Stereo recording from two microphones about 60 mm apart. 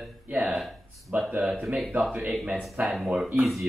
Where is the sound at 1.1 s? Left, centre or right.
Right.